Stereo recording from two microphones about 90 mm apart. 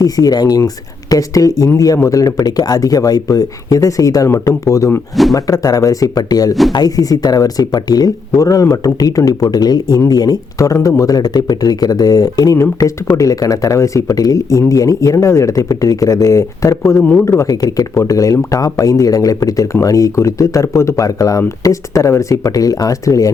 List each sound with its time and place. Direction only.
0.0 s speech: 45° left (ahead or behind)
17.0 s speech: 15° left (ahead or behind)
17.2 s speech: 35° left (ahead or behind)